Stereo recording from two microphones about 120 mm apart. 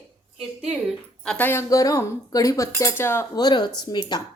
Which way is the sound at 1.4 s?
25° left (ahead or behind).